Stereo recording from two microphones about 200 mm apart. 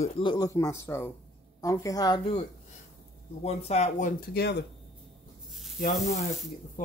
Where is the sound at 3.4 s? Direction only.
30° left (ahead or behind).